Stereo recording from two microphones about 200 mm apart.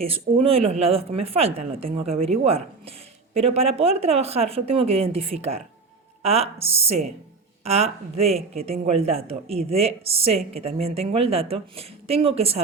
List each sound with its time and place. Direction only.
0.0 s speech: 30° right (ahead or behind)